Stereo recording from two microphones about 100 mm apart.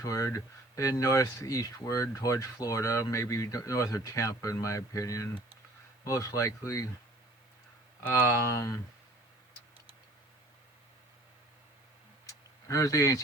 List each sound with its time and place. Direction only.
0.0 s speech: 35° left (ahead or behind)
8.1 s speech: 30° left (ahead or behind)
12.2 s a sound: 35° left (ahead or behind)